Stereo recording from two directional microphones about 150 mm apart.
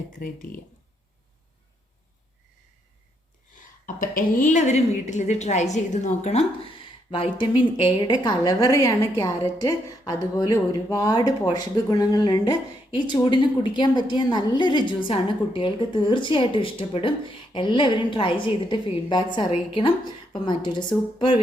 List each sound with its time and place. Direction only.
0.2 s speech: 65° left (ahead or behind)
3.6 s a woman's voice: 60° left (ahead or behind); by 20.8 s 30° left (ahead or behind)